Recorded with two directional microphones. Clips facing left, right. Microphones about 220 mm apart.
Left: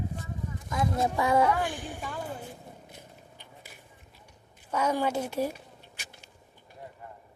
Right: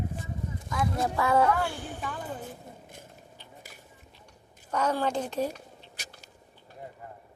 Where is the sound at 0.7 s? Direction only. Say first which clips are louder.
Left 1 dB; 25° left (ahead or behind).